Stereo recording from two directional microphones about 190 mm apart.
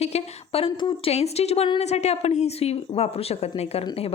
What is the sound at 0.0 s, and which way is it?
Speech, 35° left (ahead or behind).